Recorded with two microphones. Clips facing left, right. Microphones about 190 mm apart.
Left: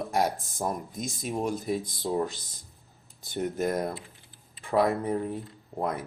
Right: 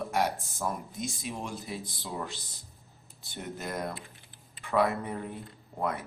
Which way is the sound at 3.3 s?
45° left (ahead or behind).